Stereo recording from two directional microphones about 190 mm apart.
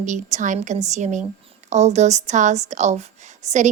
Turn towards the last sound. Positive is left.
turn(degrees=-40)  # may be behind; listen again after turning